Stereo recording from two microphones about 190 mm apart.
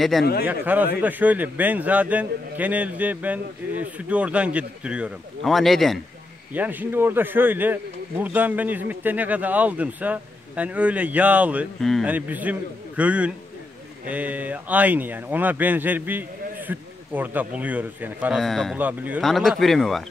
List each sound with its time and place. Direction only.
0.2 s speech: 55° left (ahead or behind)
0.5 s a man's voice: 10° right (ahead or behind)